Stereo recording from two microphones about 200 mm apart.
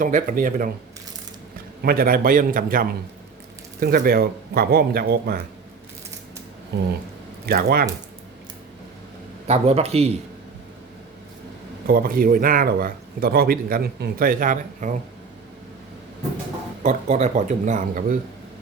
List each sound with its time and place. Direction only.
0.0 s speech: 40° right (ahead or behind)
1.8 s speech: 50° right (ahead or behind)
6.7 s speech: 55° right (ahead or behind)
9.5 s speech: 30° right (ahead or behind)
11.9 s speech: 45° right (ahead or behind)
16.8 s speech: 35° right (ahead or behind)